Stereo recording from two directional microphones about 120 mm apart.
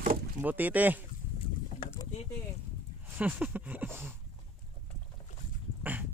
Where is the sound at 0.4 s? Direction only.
15° right (ahead or behind).